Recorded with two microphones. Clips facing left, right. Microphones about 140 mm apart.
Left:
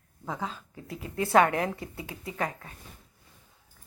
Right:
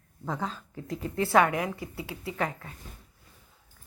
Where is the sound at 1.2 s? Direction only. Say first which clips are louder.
Left 1 dB; 20° left (ahead or behind).